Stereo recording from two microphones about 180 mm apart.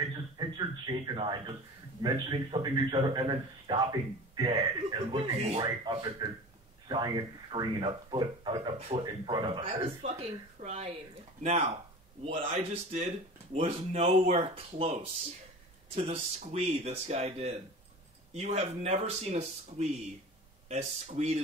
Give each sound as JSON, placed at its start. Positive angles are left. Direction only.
{"t": 0.0, "sound": "a sound", "side_deg": -25}
{"t": 2.0, "sound": "a man's voice", "side_deg": -25}
{"t": 20.6, "sound": "speech", "side_deg": -40}